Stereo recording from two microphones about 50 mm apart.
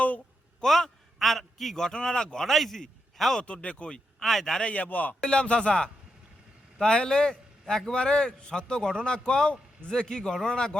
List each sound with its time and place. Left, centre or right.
0.6 s a man's voice: centre
3.4 s speech: left
4.2 s a man's voice: centre
4.6 s speech: left
5.2 s a man's voice: centre